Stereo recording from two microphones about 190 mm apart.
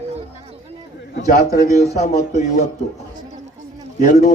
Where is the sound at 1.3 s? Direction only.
45° left (ahead or behind).